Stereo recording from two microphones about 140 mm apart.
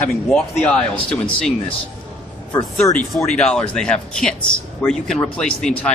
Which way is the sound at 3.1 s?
5° left (ahead or behind).